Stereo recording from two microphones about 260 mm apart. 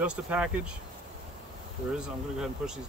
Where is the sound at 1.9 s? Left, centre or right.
Centre.